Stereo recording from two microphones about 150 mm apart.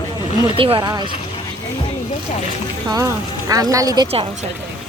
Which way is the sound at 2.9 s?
25° right (ahead or behind).